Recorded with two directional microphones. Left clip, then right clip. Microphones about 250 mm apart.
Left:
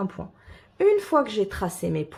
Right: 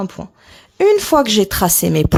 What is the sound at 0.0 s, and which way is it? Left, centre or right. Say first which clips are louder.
A woman's voice: right 6 dB; right.